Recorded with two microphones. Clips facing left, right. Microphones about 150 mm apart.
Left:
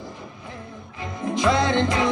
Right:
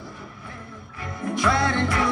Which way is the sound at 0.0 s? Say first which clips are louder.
Left 2 dB; 20° left (ahead or behind).